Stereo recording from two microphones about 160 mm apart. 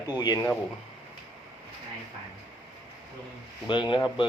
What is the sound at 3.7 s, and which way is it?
Speech, 30° left (ahead or behind).